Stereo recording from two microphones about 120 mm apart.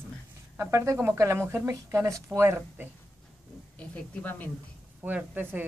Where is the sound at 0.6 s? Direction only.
25° right (ahead or behind).